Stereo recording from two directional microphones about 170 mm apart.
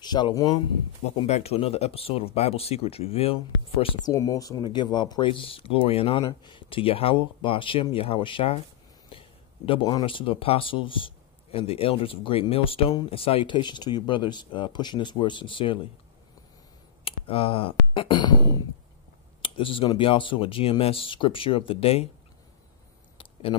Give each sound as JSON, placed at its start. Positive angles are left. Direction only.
{"t": 0.0, "sound": "speech", "side_deg": 25}
{"t": 1.0, "sound": "speech", "side_deg": 40}
{"t": 4.1, "sound": "speech", "side_deg": 20}
{"t": 9.1, "sound": "a sound", "side_deg": 30}
{"t": 9.7, "sound": "speech", "side_deg": 25}
{"t": 17.0, "sound": "speech", "side_deg": 35}